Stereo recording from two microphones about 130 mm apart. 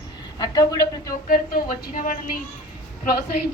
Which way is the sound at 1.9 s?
90° left.